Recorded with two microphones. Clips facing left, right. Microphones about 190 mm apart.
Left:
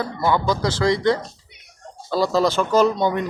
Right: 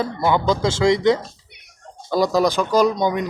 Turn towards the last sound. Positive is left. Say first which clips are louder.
# even
turn(degrees=-15)  # may be behind; listen again after turning